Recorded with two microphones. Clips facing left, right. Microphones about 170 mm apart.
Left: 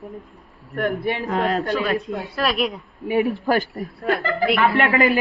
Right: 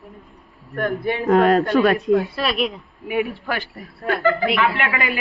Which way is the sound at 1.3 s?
55° right (ahead or behind).